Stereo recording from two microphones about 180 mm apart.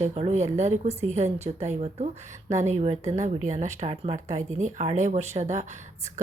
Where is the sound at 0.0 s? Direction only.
35° right (ahead or behind).